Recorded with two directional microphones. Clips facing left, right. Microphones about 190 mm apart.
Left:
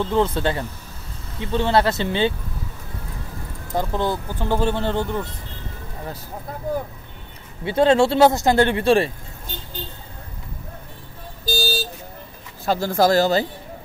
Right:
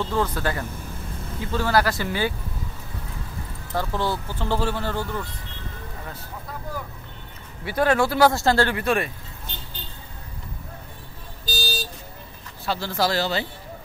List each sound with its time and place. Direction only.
0.0 s speech: 20° left (ahead or behind)
3.7 s speech: 20° left (ahead or behind)
7.6 s speech: 25° left (ahead or behind)
11.4 s vehicle: 45° left (ahead or behind)
12.6 s a man's voice: 45° left (ahead or behind)